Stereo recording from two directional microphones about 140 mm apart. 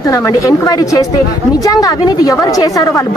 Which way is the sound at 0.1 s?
25° left (ahead or behind).